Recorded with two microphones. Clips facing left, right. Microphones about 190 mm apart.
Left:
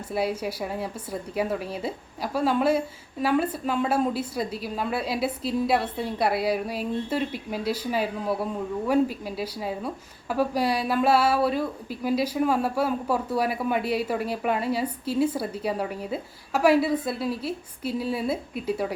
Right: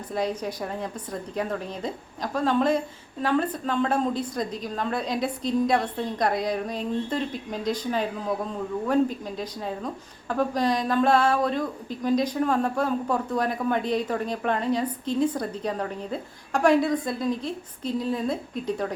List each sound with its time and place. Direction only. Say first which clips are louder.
0.1 s a woman's voice: left 1 dB; 10° left (ahead or behind)